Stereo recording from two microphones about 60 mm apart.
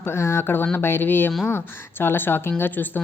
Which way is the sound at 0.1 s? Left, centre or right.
Left.